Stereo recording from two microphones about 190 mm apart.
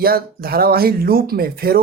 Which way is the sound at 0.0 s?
50° right (ahead or behind).